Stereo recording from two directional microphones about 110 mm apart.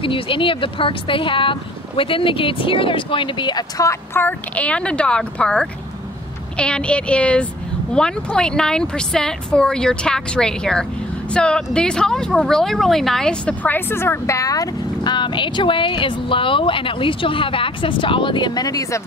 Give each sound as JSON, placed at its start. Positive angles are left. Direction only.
{"t": 0.0, "sound": "speech", "side_deg": 50}
{"t": 4.1, "sound": "speech", "side_deg": 15}